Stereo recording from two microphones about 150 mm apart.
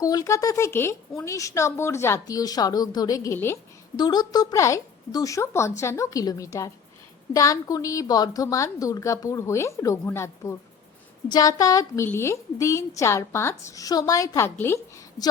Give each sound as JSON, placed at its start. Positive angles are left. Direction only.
{"t": 0.0, "sound": "speech", "side_deg": 25}
{"t": 3.9, "sound": "speech", "side_deg": 30}